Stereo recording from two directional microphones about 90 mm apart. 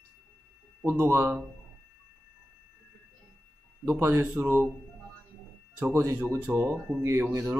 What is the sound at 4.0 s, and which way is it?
Speech, 25° right (ahead or behind).